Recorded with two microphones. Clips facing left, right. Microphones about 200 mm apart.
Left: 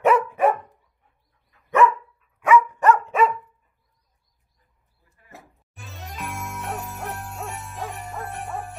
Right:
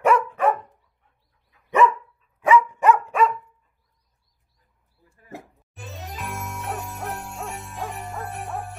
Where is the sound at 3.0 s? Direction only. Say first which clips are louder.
Left 1 dB; centre (ahead or behind).